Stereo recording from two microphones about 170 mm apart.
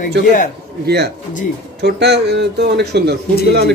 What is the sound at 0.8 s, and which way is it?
A man's voice, 75° right (ahead or behind).